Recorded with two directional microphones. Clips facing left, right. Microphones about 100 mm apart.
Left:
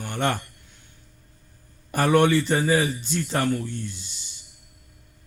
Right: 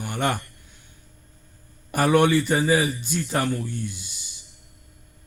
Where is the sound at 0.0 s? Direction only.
10° right (ahead or behind).